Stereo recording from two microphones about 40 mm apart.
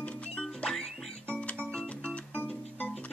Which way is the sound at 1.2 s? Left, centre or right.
Left.